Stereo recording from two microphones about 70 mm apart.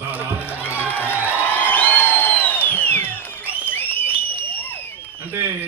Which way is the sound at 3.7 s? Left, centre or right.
Left.